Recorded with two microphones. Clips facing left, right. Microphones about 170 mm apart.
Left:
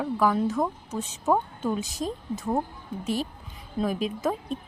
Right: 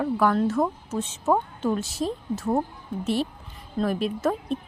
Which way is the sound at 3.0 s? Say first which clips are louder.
Right 3 dB; 40° left (ahead or behind).